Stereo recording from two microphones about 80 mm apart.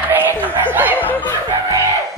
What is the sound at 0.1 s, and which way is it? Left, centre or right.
Chuckle, right.